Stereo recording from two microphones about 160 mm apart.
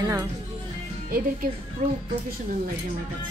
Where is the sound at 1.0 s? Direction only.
65° right (ahead or behind).